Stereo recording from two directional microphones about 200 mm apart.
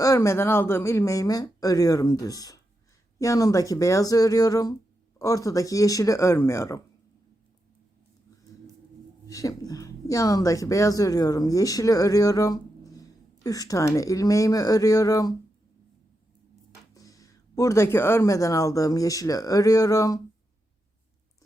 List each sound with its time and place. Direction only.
0.0 s speech: 15° left (ahead or behind)
9.2 s speech: 15° left (ahead or behind)
16.9 s speech: 15° left (ahead or behind)